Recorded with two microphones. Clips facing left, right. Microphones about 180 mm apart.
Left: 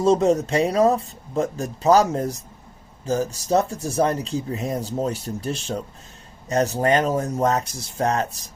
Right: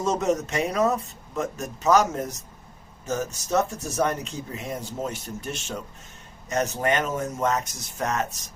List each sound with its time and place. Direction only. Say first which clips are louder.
0.0 s speech: left 6 dB; 30° left (ahead or behind)